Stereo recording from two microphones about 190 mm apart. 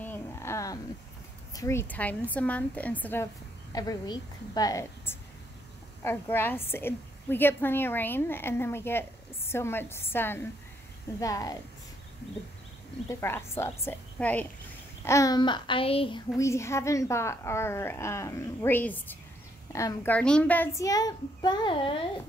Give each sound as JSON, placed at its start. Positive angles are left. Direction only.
{"t": 0.0, "sound": "a sound", "side_deg": 10}
{"t": 1.5, "sound": "a woman's voice", "side_deg": 15}
{"t": 3.7, "sound": "a woman's voice", "side_deg": 20}
{"t": 13.1, "sound": "a woman's voice", "side_deg": 15}
{"t": 16.3, "sound": "a woman's voice", "side_deg": 15}